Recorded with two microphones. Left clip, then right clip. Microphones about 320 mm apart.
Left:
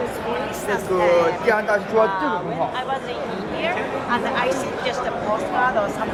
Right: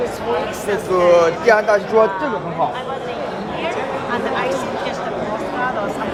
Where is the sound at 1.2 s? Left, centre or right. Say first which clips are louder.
Right 5 dB; right.